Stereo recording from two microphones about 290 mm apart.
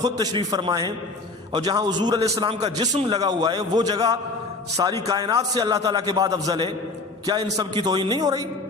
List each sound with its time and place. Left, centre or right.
0.0 s a man's voice: centre